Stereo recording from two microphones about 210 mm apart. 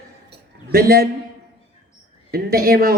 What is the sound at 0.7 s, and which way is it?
Speech, 45° right (ahead or behind).